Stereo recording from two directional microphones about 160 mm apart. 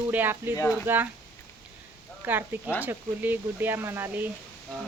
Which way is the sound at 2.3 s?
10° right (ahead or behind).